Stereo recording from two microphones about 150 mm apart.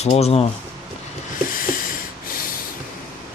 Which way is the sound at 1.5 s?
70° left (ahead or behind).